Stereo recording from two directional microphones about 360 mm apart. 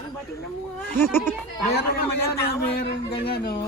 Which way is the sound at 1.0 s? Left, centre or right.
Centre.